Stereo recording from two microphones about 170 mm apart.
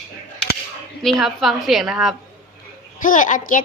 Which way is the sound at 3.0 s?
50° left (ahead or behind).